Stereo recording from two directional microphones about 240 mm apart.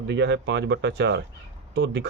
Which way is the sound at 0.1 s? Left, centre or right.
Right.